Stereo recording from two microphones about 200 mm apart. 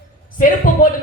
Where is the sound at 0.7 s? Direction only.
40° left (ahead or behind).